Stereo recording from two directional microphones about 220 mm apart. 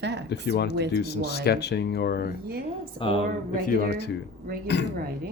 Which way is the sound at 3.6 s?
45° left (ahead or behind).